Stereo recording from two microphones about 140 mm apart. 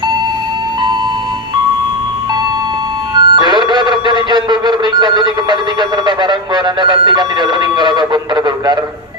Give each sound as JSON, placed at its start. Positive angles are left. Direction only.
{"t": 3.2, "sound": "music", "side_deg": -30}